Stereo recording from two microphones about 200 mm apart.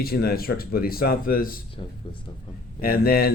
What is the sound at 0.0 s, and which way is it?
Speech, 50° left (ahead or behind).